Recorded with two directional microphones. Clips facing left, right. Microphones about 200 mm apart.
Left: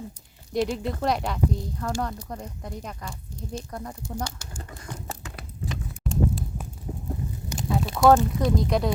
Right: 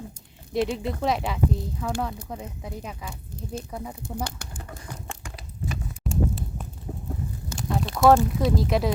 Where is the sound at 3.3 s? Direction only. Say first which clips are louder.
Even; 55° right (ahead or behind).